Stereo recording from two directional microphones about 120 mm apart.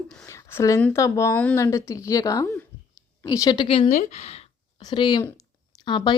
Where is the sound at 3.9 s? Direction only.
65° left (ahead or behind).